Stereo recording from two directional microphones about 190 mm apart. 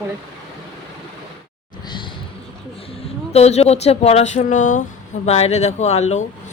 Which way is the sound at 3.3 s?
35° left (ahead or behind).